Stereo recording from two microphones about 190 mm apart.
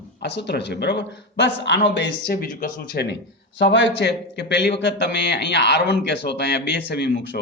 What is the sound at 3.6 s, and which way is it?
A man's voice, 65° left (ahead or behind).